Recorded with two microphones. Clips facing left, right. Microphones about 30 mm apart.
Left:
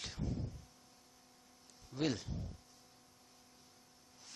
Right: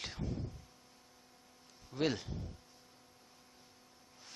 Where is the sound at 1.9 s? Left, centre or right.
Centre.